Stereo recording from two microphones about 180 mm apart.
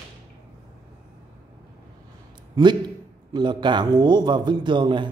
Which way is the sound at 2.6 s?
20° right (ahead or behind).